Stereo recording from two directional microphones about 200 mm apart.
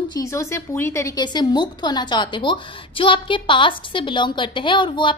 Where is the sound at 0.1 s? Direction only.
15° left (ahead or behind).